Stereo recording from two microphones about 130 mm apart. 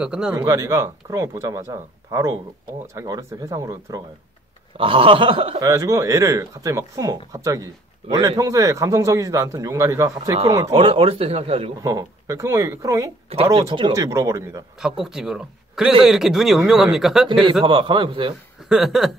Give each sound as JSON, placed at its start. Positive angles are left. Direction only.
{"t": 0.0, "sound": "speech", "side_deg": -5}
{"t": 0.4, "sound": "speech", "side_deg": -25}
{"t": 4.7, "sound": "speech", "side_deg": -45}
{"t": 5.6, "sound": "speech", "side_deg": -25}
{"t": 10.7, "sound": "speech", "side_deg": -45}
{"t": 11.8, "sound": "speech", "side_deg": -25}
{"t": 14.8, "sound": "speech", "side_deg": -5}
{"t": 17.3, "sound": "a man's voice", "side_deg": -40}
{"t": 18.7, "sound": "speech", "side_deg": -5}